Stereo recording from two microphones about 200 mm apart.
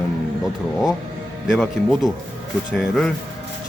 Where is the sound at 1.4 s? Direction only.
Centre (ahead or behind).